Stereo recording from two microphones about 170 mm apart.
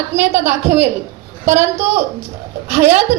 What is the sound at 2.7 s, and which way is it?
Speech, 45° right (ahead or behind).